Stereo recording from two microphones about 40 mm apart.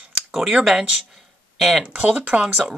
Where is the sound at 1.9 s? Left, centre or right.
Right.